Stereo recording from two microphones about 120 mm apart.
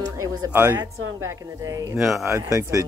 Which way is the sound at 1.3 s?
30° right (ahead or behind).